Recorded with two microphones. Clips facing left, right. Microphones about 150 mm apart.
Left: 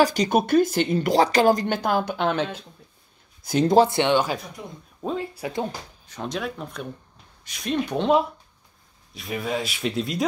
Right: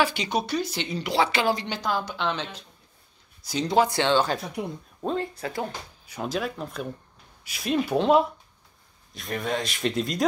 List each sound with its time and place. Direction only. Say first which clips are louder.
0.0 s speech: left 5 dB; 40° left (ahead or behind)
3.7 s speech: left 2 dB; 25° left (ahead or behind)
4.6 s speech: right 7 dB; 65° right (ahead or behind)
5.0 s speech: even; 5° left (ahead or behind)
5.4 s speech: left 3 dB; 20° left (ahead or behind)
6.0 s speech: right 1 dB; 5° right (ahead or behind)